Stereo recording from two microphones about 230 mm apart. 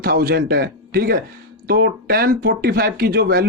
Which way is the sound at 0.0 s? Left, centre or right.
Right.